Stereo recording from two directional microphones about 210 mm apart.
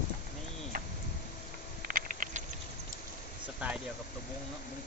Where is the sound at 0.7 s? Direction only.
45° right (ahead or behind).